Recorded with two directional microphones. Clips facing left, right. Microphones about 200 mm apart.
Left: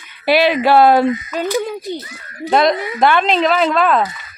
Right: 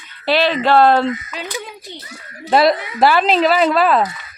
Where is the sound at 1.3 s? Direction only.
50° left (ahead or behind).